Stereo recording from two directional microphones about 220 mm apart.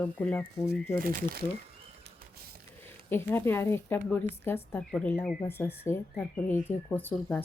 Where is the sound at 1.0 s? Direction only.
40° right (ahead or behind).